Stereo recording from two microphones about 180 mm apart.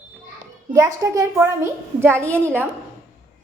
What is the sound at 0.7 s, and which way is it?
A woman's voice, 20° right (ahead or behind).